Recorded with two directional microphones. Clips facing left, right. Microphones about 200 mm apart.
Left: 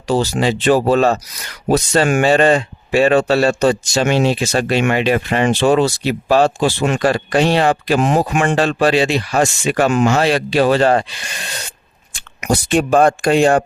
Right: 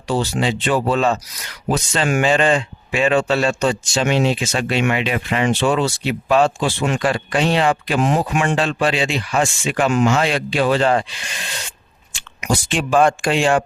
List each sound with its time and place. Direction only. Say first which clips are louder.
0.1 s speech: left 4 dB; 40° left (ahead or behind)
12.4 s speech: left 5 dB; 60° left (ahead or behind)
12.9 s speech: left 2 dB; 40° left (ahead or behind)